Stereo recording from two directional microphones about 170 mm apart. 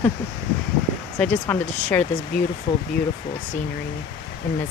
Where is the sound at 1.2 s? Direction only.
10° left (ahead or behind).